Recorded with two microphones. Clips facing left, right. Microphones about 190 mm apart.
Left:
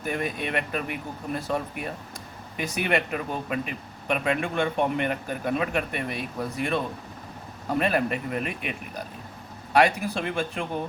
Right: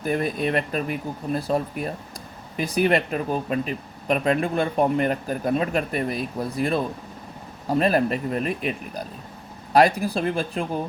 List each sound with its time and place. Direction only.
0.0 s speech: 35° right (ahead or behind)
9.7 s speech: 35° right (ahead or behind)